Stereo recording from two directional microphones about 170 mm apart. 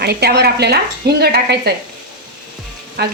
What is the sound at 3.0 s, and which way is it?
Speech, 70° right (ahead or behind).